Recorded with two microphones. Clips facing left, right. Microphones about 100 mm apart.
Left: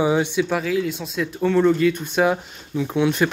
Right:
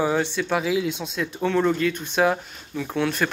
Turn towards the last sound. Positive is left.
turn(degrees=15)  # may be behind; listen again after turning